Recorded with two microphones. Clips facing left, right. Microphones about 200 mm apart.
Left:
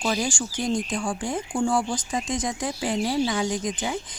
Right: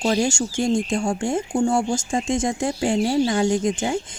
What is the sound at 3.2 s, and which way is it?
Speech, 45° right (ahead or behind).